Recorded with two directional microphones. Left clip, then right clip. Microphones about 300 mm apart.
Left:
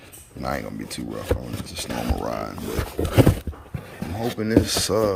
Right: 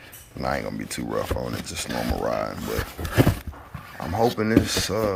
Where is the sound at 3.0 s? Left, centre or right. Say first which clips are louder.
Left 7 dB; centre.